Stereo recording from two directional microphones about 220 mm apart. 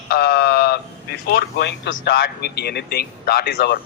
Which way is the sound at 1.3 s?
50° left (ahead or behind).